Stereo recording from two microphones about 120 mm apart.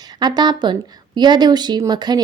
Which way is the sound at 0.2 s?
35° right (ahead or behind).